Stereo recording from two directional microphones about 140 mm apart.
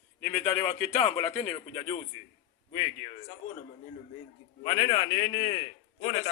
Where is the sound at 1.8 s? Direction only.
50° left (ahead or behind).